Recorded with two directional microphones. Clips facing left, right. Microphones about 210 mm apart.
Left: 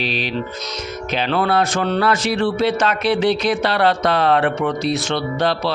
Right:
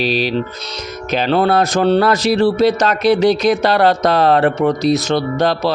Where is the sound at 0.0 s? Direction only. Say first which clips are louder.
Right 6 dB; 40° right (ahead or behind).